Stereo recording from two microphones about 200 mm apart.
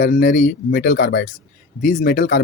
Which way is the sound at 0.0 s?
40° left (ahead or behind).